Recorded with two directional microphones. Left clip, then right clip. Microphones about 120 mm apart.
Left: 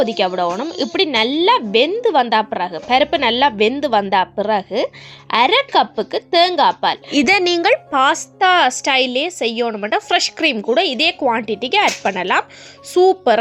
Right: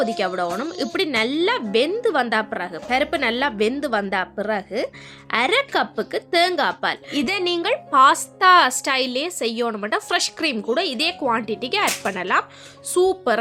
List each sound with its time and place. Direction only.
0.0 s a woman's voice: 20° left (ahead or behind)
7.1 s a woman's voice: 40° left (ahead or behind)
7.9 s a woman's voice: 15° left (ahead or behind)